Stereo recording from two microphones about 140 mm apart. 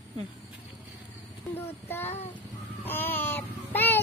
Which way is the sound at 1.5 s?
15° left (ahead or behind).